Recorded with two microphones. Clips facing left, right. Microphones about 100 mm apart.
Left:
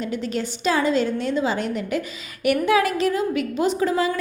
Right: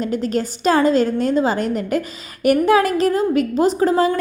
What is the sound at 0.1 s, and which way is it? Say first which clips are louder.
A woman's voice: right 5 dB; 45° right (ahead or behind).